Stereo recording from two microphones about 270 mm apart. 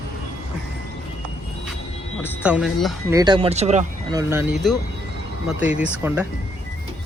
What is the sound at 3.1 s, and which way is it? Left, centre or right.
Speech, centre.